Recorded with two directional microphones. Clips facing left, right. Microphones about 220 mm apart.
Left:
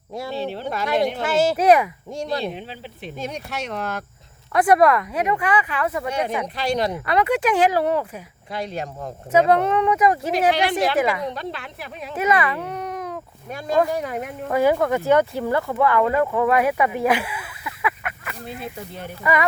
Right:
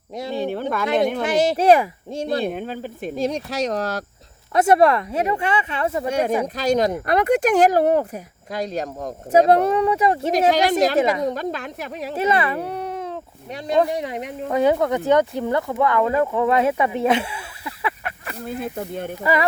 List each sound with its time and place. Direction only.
0.1 s speech: 20° right (ahead or behind)
0.3 s speech: 50° right (ahead or behind)
1.2 s speech: 20° right (ahead or behind)
2.4 s speech: 50° right (ahead or behind)
3.2 s speech: 35° right (ahead or behind)
4.5 s speech: 25° right (ahead or behind)
6.1 s speech: 45° right (ahead or behind); by 10.3 s 30° right (ahead or behind)
10.5 s a woman's voice: 40° right (ahead or behind)
18.4 s speech: 50° right (ahead or behind)
19.2 s speech: 30° right (ahead or behind)